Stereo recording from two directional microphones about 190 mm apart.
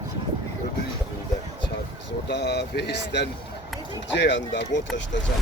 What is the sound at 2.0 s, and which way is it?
Speech, 65° left (ahead or behind).